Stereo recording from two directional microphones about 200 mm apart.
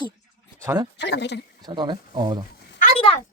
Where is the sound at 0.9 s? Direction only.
60° left (ahead or behind).